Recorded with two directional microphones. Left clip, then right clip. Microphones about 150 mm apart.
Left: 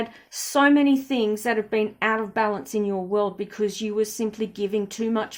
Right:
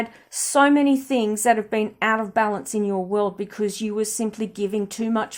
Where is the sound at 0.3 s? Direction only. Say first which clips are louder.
Right 2 dB; 40° right (ahead or behind).